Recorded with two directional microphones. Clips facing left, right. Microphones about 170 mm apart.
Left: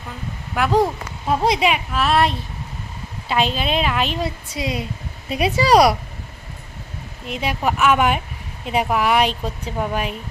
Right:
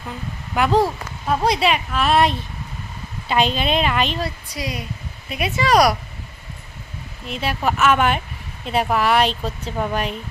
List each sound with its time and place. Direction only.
0.7 s a woman's voice: 20° left (ahead or behind)
4.2 s a woman's voice: 25° left (ahead or behind)
5.3 s speech: 35° left (ahead or behind)
7.3 s speech: 15° left (ahead or behind)